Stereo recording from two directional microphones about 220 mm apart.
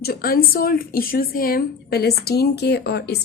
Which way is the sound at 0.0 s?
45° left (ahead or behind).